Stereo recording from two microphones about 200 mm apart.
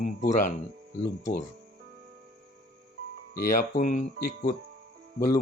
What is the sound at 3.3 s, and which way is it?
Speech, 45° left (ahead or behind).